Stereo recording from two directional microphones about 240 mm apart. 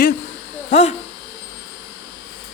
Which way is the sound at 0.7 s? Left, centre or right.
Left.